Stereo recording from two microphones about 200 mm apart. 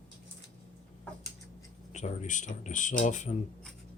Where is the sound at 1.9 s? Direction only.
35° left (ahead or behind).